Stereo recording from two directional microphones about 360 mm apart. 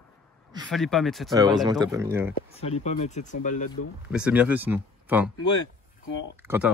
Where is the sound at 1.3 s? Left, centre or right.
Centre.